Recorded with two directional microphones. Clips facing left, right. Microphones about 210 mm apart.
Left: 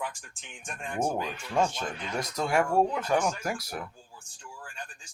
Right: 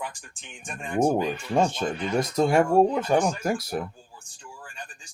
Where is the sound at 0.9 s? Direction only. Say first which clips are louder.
Right 8 dB; 20° right (ahead or behind).